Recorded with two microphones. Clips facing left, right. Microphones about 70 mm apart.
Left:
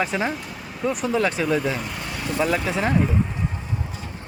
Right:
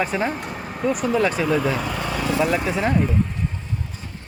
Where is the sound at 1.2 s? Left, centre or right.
Centre.